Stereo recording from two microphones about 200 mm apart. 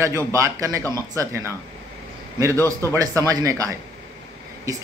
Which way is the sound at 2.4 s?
15° right (ahead or behind).